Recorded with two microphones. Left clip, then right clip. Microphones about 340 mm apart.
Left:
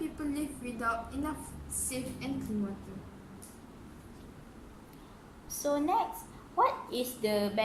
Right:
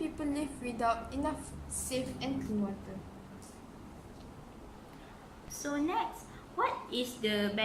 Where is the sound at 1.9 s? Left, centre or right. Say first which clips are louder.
Right 4 dB; centre.